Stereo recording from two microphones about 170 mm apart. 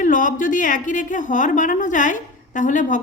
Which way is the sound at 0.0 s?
50° left (ahead or behind).